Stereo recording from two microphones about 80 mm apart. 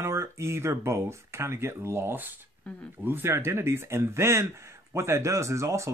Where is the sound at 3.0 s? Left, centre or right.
Right.